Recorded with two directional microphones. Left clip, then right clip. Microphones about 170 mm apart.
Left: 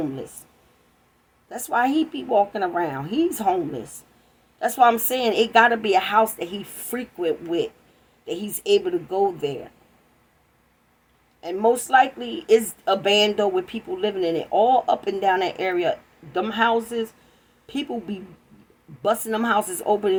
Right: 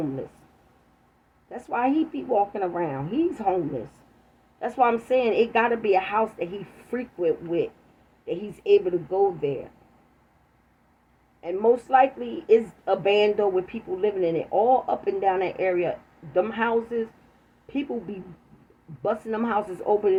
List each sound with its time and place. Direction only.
1.5 s a woman's voice: 45° left (ahead or behind)
4.6 s a woman's voice: 45° left (ahead or behind)
11.3 s a woman's voice: 40° left (ahead or behind)
19.0 s a woman's voice: 40° left (ahead or behind)